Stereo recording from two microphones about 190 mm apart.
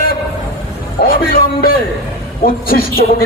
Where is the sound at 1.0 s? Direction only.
50° left (ahead or behind).